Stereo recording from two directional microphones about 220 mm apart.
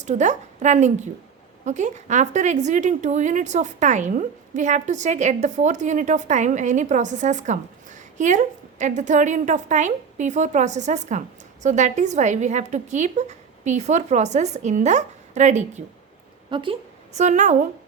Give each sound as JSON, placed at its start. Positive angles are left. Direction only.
{"t": 0.0, "sound": "a woman's voice", "side_deg": -35}
{"t": 17.2, "sound": "a woman's voice", "side_deg": -35}